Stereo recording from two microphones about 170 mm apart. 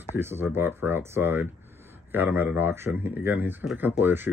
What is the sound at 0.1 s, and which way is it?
Speech, 15° right (ahead or behind).